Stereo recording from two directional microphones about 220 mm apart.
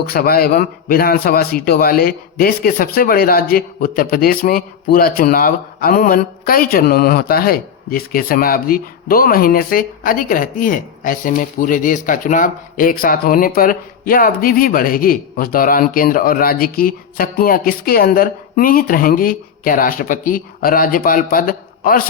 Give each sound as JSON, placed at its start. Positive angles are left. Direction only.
{"t": 0.0, "sound": "a man's voice", "side_deg": 45}